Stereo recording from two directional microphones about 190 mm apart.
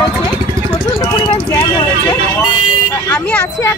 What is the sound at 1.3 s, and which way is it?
Speech, 25° left (ahead or behind).